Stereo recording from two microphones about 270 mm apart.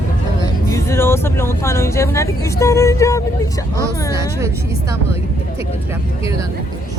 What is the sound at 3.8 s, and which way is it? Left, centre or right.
Speech, centre.